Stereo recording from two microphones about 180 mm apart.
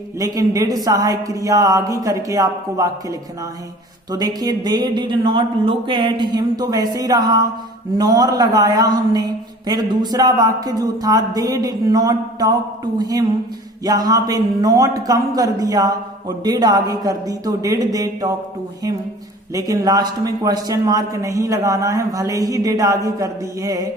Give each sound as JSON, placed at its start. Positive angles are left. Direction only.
{"t": 0.2, "sound": "a man's voice", "side_deg": -20}
{"t": 19.5, "sound": "a man's voice", "side_deg": -20}